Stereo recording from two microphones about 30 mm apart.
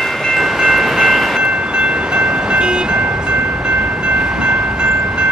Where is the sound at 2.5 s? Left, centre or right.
Right.